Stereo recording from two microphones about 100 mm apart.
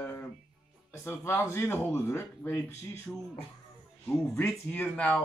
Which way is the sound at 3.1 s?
10° left (ahead or behind).